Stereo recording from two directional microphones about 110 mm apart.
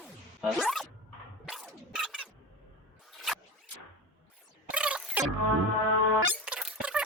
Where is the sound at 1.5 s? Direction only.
Centre (ahead or behind).